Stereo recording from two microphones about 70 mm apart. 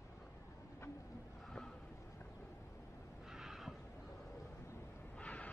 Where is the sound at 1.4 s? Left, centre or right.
Centre.